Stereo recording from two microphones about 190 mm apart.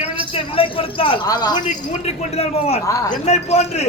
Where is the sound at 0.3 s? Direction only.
30° left (ahead or behind).